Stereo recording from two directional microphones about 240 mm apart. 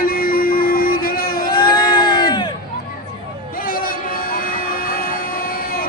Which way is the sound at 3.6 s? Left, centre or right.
Left.